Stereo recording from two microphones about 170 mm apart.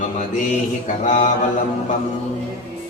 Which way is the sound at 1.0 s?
50° left (ahead or behind).